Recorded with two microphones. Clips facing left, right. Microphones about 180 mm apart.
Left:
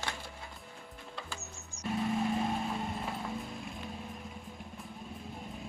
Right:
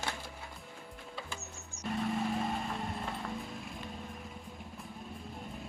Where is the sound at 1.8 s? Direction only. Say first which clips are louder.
Left 2 dB; centre (ahead or behind).